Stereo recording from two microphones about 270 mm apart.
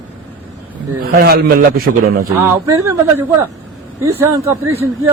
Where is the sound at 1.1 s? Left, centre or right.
Right.